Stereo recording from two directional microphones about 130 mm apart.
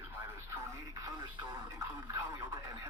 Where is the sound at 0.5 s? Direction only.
20° right (ahead or behind).